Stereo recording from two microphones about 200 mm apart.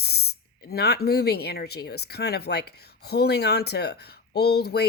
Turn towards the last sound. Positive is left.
turn(degrees=55)  # may be behind; listen again after turning